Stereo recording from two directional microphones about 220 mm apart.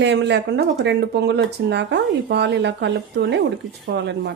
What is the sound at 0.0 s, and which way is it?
Speech, 50° right (ahead or behind).